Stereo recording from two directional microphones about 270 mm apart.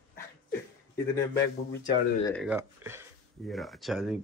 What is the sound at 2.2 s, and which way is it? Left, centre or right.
Speech, centre.